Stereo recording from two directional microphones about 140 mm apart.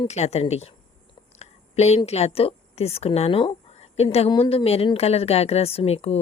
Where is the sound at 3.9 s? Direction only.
50° left (ahead or behind).